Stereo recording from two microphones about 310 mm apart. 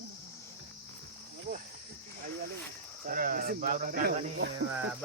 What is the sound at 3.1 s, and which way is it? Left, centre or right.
Speech, right.